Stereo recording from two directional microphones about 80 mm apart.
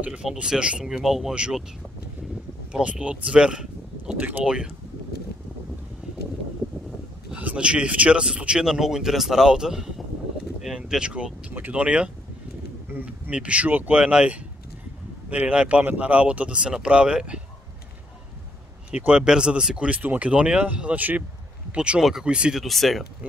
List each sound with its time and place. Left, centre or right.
0.0 s speech: centre
2.7 s speech: centre
7.3 s speech: centre
18.9 s speech: centre
22.6 s speech: centre